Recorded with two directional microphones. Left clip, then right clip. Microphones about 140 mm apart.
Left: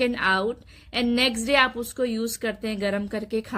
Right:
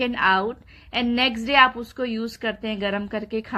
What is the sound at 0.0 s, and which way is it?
A woman's voice, 25° left (ahead or behind).